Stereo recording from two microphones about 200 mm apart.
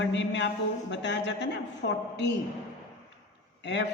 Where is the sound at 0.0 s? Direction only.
65° left (ahead or behind).